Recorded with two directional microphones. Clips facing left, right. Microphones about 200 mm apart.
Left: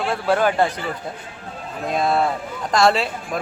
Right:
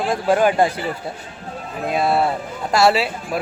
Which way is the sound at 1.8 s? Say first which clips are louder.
Right 1 dB; 5° right (ahead or behind).